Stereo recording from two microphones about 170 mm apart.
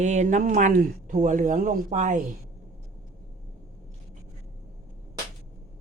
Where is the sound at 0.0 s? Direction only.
45° right (ahead or behind).